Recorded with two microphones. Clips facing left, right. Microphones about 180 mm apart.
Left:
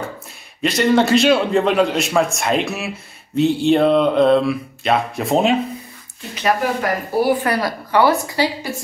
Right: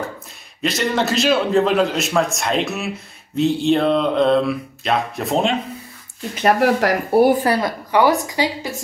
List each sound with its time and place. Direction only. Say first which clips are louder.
0.6 s mantra: left 5 dB; centre (ahead or behind)
6.6 s speech: right 4 dB; 75° right (ahead or behind); by 7.3 s 60° right (ahead or behind)
7.4 s a woman's voice: right 1 dB; 25° right (ahead or behind)